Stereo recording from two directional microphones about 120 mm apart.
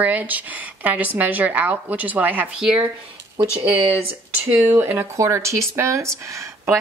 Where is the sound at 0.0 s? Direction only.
15° right (ahead or behind).